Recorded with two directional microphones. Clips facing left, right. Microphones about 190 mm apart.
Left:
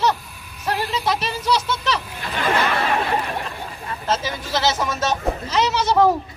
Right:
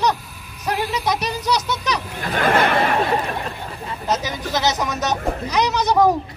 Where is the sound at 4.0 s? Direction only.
15° right (ahead or behind).